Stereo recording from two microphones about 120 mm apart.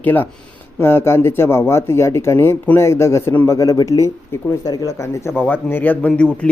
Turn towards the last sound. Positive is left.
turn(degrees=10)  # may be behind; listen again after turning